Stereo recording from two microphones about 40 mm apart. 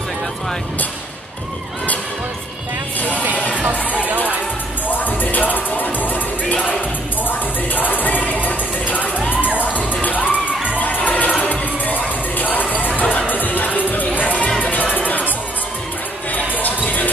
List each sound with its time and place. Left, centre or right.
4.8 s music: left
7.2 s music: left
16.3 s music: left